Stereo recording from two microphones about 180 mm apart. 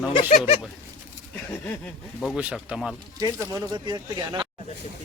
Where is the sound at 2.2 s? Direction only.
Centre (ahead or behind).